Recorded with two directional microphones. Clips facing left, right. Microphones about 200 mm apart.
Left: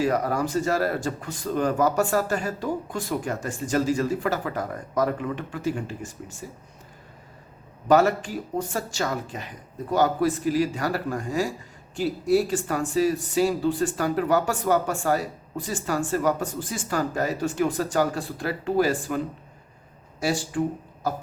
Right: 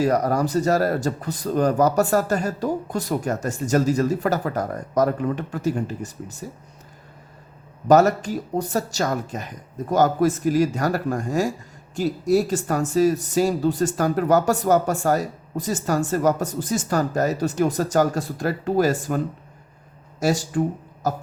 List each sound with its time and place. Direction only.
0.0 s a man's voice: 40° right (ahead or behind)
7.9 s a man's voice: 40° right (ahead or behind)